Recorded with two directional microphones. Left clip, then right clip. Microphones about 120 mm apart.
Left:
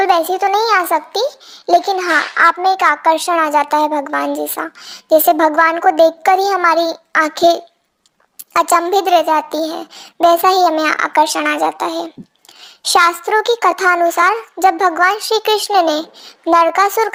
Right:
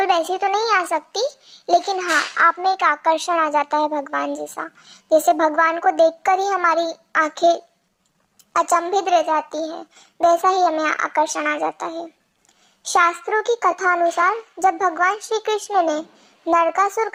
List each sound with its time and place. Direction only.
0.0 s a child's voice: 30° left (ahead or behind)